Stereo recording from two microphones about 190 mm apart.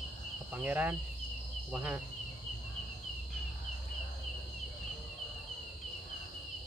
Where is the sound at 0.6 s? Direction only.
5° right (ahead or behind).